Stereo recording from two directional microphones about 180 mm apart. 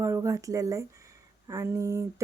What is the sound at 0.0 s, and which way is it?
A woman's voice, 15° right (ahead or behind).